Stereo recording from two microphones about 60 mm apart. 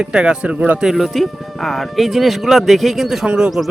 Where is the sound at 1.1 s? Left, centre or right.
Centre.